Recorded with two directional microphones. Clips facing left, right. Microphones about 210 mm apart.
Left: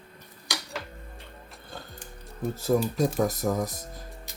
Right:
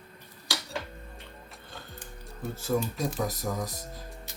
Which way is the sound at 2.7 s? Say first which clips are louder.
Left 5 dB; 40° left (ahead or behind).